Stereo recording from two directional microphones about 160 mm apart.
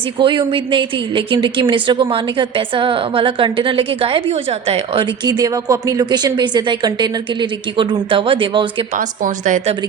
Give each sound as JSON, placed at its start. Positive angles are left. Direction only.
{"t": 0.2, "sound": "a woman's voice", "side_deg": -30}
{"t": 5.2, "sound": "a woman's voice", "side_deg": -25}
{"t": 9.0, "sound": "a woman's voice", "side_deg": -55}